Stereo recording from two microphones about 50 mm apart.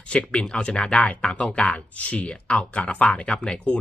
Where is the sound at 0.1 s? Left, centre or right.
Left.